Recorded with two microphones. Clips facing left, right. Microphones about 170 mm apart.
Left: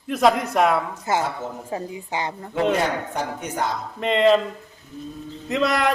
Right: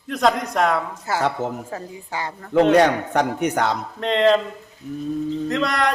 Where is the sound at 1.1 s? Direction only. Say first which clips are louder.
Right 2 dB; 20° left (ahead or behind).